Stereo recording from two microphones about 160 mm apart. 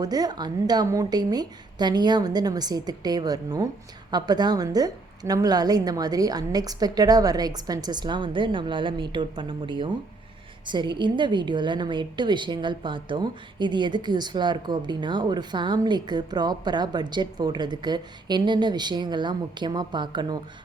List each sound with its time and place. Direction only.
0.0 s a woman's voice: 25° right (ahead or behind)